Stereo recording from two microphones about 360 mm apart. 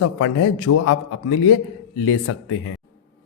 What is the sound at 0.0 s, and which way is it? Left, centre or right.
Speech, left.